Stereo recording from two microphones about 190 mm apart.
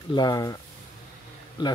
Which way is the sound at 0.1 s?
20° left (ahead or behind).